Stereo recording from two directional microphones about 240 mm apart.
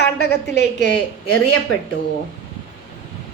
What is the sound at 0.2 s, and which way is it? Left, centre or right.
Speech, left.